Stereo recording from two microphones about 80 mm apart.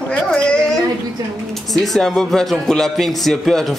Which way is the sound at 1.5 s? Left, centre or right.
Centre.